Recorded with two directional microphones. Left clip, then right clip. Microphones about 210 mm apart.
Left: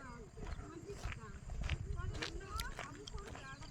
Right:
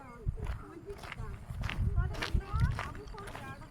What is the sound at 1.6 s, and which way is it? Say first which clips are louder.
Run: right 7 dB; 40° right (ahead or behind).